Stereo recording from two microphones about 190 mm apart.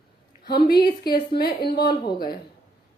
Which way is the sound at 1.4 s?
55° left (ahead or behind).